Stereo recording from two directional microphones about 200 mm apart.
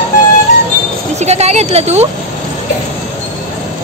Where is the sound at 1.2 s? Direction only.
35° right (ahead or behind).